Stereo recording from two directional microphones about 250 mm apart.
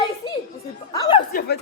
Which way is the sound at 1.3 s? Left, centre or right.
Left.